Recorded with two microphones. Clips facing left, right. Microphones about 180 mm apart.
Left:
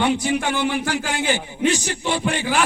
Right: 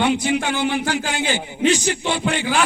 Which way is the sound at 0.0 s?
25° right (ahead or behind).